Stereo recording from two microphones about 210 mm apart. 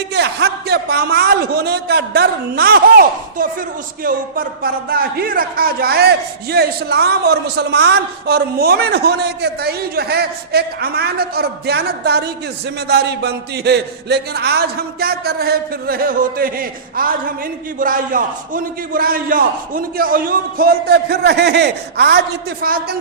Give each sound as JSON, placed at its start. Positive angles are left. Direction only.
{"t": 0.1, "sound": "a man's voice", "side_deg": -50}